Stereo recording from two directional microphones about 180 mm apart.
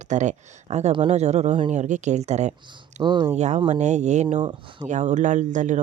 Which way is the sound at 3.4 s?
40° right (ahead or behind).